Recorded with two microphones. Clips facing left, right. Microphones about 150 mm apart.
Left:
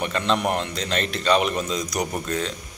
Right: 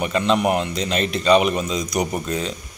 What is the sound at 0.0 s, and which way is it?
A man's voice, 5° right (ahead or behind).